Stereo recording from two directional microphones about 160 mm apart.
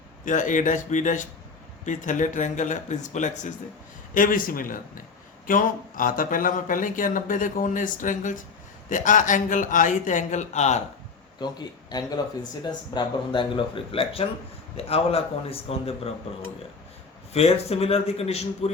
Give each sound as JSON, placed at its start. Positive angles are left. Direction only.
{"t": 0.3, "sound": "speech", "side_deg": 55}
{"t": 11.4, "sound": "speech", "side_deg": 25}
{"t": 17.3, "sound": "speech", "side_deg": 40}